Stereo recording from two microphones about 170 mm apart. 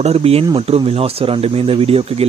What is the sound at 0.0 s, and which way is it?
Speech, 35° right (ahead or behind).